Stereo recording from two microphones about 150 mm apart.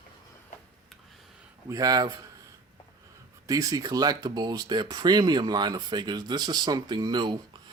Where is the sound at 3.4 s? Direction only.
25° right (ahead or behind).